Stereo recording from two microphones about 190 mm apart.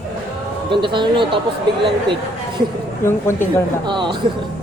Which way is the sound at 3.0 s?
15° left (ahead or behind).